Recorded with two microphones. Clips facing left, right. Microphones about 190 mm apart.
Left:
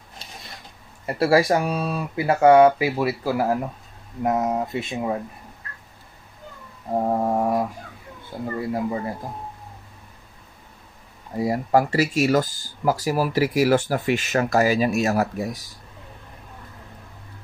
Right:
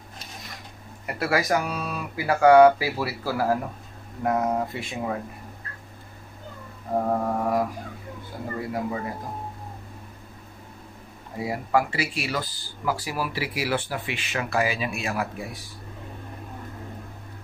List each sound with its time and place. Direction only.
1.0 s speech: 30° left (ahead or behind)
7.1 s a sound: 25° left (ahead or behind)
8.3 s speech: 25° left (ahead or behind)
11.3 s speech: 40° left (ahead or behind)